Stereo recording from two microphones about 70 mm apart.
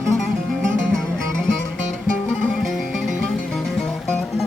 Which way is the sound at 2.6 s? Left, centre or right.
Centre.